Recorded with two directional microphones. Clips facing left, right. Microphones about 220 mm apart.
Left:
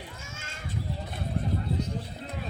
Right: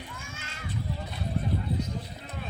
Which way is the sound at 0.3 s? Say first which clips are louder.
Even; 45° left (ahead or behind).